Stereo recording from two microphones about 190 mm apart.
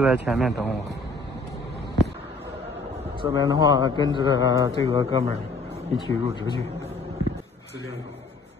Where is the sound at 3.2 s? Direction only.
20° right (ahead or behind).